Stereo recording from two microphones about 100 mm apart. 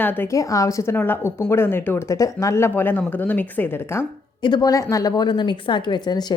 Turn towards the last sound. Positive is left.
turn(degrees=45)  # may be behind; listen again after turning